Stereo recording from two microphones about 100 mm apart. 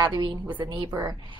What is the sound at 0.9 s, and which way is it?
Speech, 35° right (ahead or behind).